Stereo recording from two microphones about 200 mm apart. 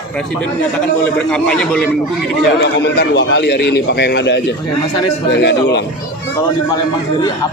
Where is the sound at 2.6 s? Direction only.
55° left (ahead or behind).